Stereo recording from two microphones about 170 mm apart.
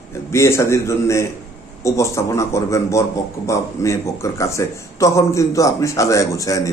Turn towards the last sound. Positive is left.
turn(degrees=20)  # may be behind; listen again after turning